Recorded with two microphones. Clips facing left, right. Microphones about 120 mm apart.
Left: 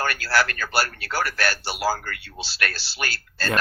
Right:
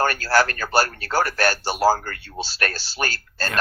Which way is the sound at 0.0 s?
45° right (ahead or behind).